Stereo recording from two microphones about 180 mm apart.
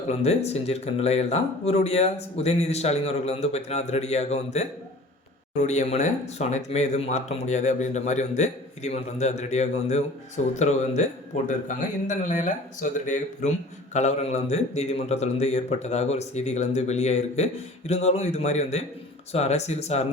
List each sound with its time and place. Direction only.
0.1 s a man's voice: 35° left (ahead or behind)